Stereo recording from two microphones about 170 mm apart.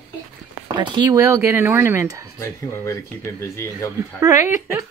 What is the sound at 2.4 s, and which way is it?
Speech, 15° left (ahead or behind).